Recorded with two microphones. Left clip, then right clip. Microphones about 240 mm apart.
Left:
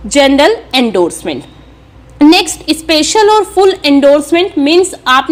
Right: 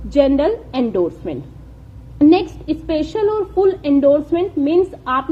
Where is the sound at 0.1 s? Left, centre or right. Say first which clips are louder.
Left 7 dB; left.